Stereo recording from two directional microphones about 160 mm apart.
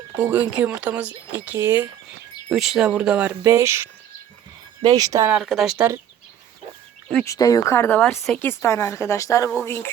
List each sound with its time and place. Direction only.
0.2 s speech: 10° right (ahead or behind)
2.5 s speech: centre (ahead or behind); by 5.3 s 20° right (ahead or behind)
5.3 s speech: centre (ahead or behind)
7.3 s speech: 25° left (ahead or behind)